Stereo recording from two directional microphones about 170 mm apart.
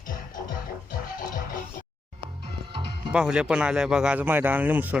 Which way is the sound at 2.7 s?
30° right (ahead or behind).